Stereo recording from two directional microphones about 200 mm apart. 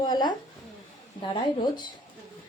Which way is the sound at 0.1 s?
20° left (ahead or behind).